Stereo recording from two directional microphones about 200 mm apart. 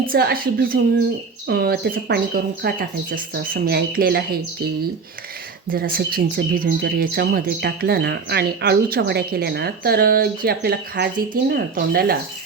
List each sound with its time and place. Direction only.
0.1 s speech: 50° right (ahead or behind)
5.6 s speech: 45° right (ahead or behind)